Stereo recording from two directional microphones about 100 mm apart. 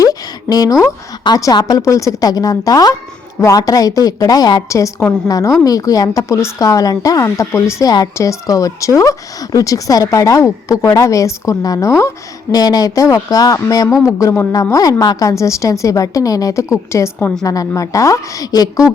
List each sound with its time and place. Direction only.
0.0 s a sound: 40° left (ahead or behind)
1.5 s a woman's voice: 35° left (ahead or behind)
4.7 s a woman's voice: 30° left (ahead or behind)
12.5 s a woman's voice: 40° left (ahead or behind)